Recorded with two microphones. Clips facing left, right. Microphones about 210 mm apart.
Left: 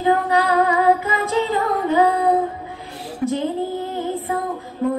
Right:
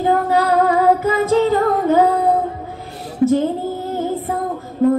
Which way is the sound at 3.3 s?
40° right (ahead or behind).